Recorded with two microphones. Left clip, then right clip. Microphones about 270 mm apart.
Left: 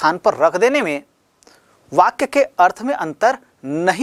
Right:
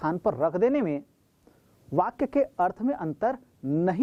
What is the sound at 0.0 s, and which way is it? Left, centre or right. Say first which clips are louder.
A woman's voice: left 11 dB; centre.